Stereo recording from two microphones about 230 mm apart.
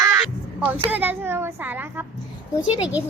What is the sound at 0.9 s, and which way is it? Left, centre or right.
Speech, centre.